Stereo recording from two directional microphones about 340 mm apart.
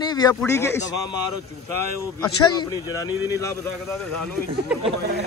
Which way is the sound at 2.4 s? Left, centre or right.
Centre.